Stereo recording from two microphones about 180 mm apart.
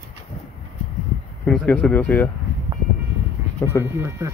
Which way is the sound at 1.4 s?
5° left (ahead or behind).